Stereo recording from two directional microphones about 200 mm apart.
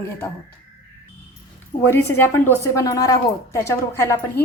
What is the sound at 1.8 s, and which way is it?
A woman's voice, 10° left (ahead or behind).